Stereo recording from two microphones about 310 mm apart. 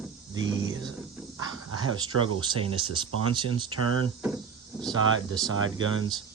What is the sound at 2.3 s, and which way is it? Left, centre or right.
Speech, centre.